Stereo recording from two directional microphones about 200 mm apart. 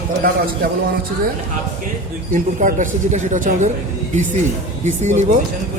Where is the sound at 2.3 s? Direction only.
40° right (ahead or behind).